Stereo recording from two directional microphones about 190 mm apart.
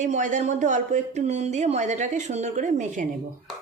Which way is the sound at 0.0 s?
40° right (ahead or behind).